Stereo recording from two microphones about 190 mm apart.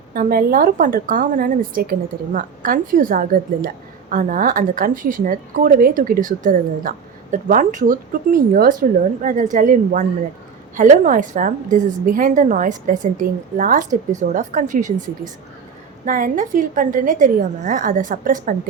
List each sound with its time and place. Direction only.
0.1 s a woman's voice: 50° right (ahead or behind)